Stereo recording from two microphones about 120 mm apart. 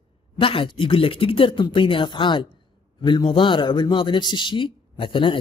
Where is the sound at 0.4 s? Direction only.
45° left (ahead or behind).